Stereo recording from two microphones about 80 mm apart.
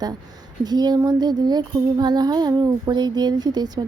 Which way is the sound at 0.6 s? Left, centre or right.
Right.